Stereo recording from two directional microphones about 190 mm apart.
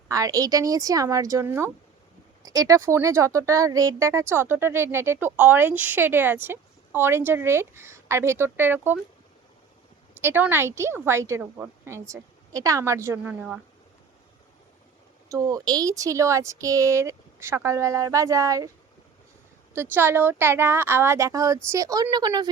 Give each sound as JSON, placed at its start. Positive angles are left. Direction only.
{"t": 0.1, "sound": "speech", "side_deg": -20}
{"t": 10.2, "sound": "speech", "side_deg": -10}
{"t": 15.3, "sound": "speech", "side_deg": -15}
{"t": 19.7, "sound": "speech", "side_deg": -10}